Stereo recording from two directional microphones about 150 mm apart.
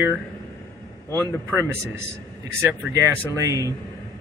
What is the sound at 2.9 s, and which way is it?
Speech, 20° right (ahead or behind).